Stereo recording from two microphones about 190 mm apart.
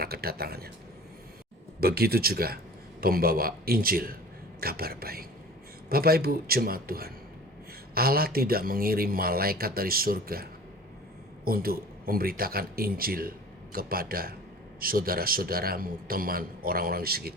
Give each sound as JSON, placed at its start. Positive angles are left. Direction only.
{"t": 0.0, "sound": "speech", "side_deg": -55}
{"t": 1.8, "sound": "speech", "side_deg": -55}